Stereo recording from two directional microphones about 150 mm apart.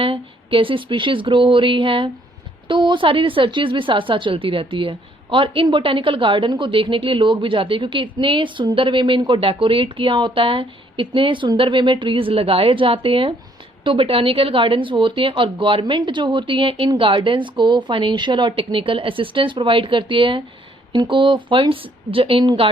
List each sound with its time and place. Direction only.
0.0 s speech: 35° right (ahead or behind)